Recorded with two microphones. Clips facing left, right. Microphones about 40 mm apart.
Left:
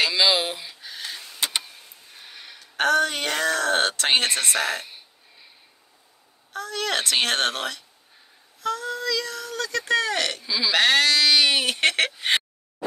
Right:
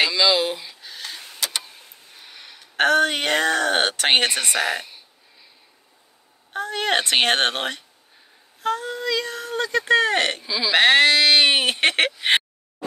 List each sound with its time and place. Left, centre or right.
0.1 s a sound: centre
1.4 s vehicle: left
2.1 s a sound: centre
2.6 s speech: right
4.3 s speech: centre
6.5 s speech: right
10.4 s speech: centre
10.7 s speech: right